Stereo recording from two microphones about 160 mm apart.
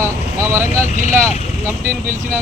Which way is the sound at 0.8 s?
45° left (ahead or behind).